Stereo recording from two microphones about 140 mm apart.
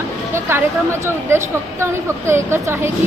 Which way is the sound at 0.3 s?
15° right (ahead or behind).